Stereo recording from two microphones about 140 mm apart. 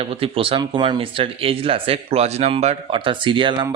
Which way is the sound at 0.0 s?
40° right (ahead or behind).